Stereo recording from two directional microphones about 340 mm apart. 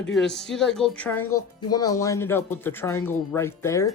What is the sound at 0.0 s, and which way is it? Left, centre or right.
Speech, centre.